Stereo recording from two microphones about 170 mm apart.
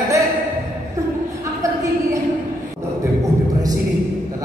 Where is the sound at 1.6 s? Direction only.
20° right (ahead or behind).